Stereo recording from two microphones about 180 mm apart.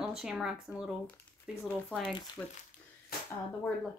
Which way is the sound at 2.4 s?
10° left (ahead or behind).